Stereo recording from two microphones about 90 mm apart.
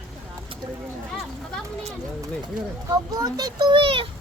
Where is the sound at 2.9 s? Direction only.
45° right (ahead or behind); by 4.1 s 75° right (ahead or behind).